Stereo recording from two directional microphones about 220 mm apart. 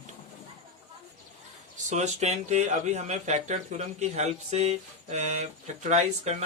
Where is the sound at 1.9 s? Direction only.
30° right (ahead or behind).